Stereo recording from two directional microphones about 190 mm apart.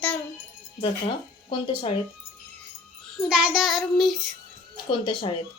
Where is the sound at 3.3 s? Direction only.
5° right (ahead or behind).